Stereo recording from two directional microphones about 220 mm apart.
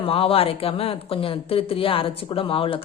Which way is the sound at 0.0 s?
25° left (ahead or behind).